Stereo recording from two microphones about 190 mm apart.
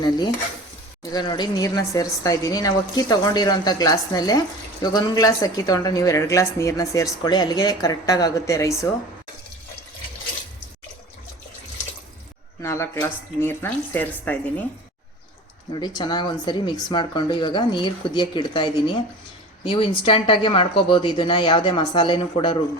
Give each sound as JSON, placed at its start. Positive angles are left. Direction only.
{"t": 1.1, "sound": "speech", "side_deg": 20}
{"t": 12.6, "sound": "speech", "side_deg": 15}
{"t": 15.7, "sound": "speech", "side_deg": 20}